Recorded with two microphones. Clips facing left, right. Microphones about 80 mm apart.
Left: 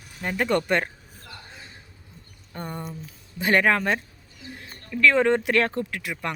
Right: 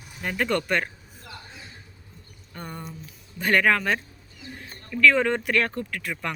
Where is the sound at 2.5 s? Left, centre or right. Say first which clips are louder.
Left 3 dB; left.